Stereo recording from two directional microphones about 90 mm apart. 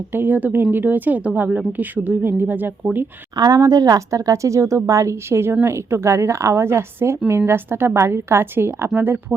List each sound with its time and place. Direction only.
0.1 s a woman's voice: 20° right (ahead or behind)
3.3 s a woman's voice: 45° right (ahead or behind); by 9.2 s 25° right (ahead or behind)